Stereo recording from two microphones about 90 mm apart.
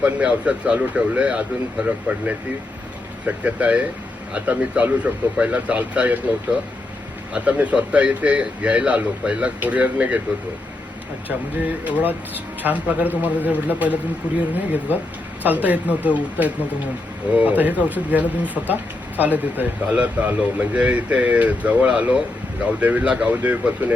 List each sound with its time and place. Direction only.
0.0 s speech: 15° right (ahead or behind)
7.3 s speech: 15° right (ahead or behind)
11.3 s a man's voice: 20° right (ahead or behind)
15.4 s speech: 20° right (ahead or behind)